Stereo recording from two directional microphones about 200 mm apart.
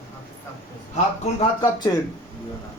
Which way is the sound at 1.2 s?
25° left (ahead or behind).